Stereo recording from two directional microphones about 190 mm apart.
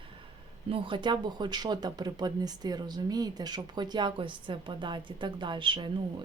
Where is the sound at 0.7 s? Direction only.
25° right (ahead or behind).